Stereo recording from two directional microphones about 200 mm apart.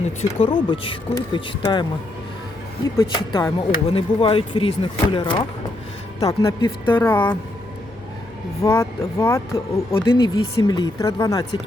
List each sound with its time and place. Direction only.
0.2 s speech: 25° left (ahead or behind)
3.0 s speech: 25° left (ahead or behind)
8.6 s speech: 15° left (ahead or behind)